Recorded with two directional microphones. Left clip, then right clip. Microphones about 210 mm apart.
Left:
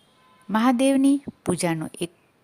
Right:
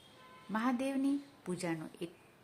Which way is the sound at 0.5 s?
50° left (ahead or behind).